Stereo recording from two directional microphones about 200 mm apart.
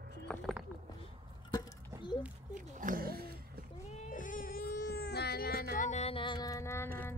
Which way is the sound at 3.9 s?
35° left (ahead or behind).